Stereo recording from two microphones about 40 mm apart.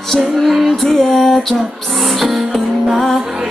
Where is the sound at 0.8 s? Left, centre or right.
Centre.